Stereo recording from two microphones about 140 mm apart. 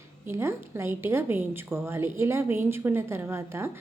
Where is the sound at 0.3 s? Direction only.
20° right (ahead or behind).